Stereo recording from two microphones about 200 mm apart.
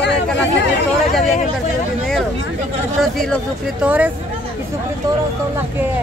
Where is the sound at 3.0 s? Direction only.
Centre (ahead or behind).